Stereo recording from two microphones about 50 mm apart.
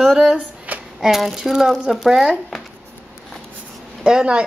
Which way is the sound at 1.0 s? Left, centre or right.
Centre.